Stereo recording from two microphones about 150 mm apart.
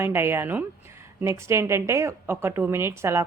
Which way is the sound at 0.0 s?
15° right (ahead or behind).